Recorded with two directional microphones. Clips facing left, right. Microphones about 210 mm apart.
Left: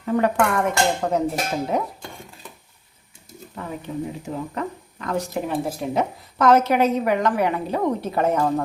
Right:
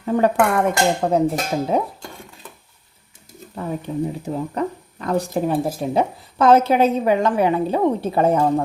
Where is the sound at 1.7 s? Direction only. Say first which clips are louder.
Right 3 dB; 30° right (ahead or behind).